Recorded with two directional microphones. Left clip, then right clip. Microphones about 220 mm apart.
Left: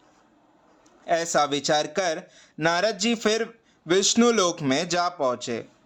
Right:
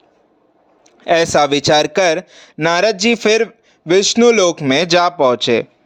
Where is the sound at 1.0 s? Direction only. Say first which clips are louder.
Right 10 dB; 35° right (ahead or behind).